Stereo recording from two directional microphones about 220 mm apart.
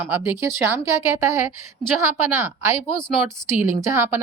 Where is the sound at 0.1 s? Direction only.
10° right (ahead or behind).